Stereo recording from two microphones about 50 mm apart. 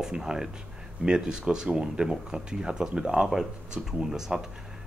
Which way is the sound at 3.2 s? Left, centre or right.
Centre.